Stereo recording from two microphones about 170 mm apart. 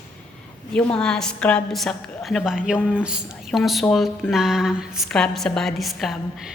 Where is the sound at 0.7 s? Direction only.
5° left (ahead or behind).